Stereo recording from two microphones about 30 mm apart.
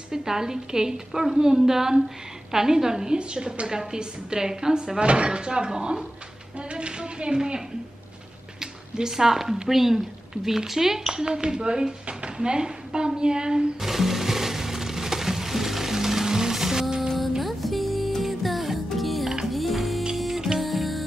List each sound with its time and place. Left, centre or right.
0.1 s a woman's voice: centre
3.2 s a woman's voice: right
8.5 s a sound: right
9.7 s a woman's voice: centre
11.2 s a woman's voice: right
13.7 s music: centre
17.4 s music: centre
20.2 s music: centre
20.6 s music: centre